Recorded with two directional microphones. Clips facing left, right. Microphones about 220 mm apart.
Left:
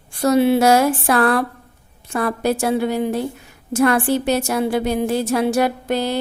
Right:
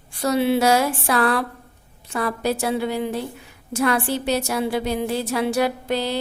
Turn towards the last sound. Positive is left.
turn(degrees=50)  # may be behind; listen again after turning